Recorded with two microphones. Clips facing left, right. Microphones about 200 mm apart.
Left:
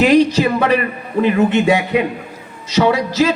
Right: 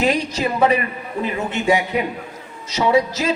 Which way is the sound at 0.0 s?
70° left (ahead or behind).